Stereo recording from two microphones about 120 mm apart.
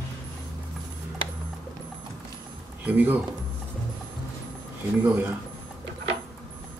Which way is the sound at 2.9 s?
15° right (ahead or behind).